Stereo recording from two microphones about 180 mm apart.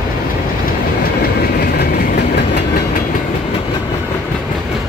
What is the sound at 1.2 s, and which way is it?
Train, 65° left (ahead or behind).